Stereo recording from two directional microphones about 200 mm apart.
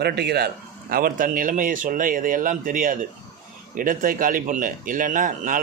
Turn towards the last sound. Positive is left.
turn(degrees=-40)  # may be behind; listen again after turning